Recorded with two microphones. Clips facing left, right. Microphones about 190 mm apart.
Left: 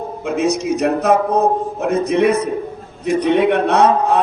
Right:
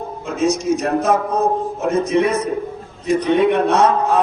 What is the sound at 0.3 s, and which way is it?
A man's voice, 65° left (ahead or behind).